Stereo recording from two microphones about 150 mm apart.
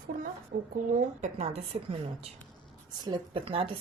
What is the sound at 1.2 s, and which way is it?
Speech, 45° right (ahead or behind).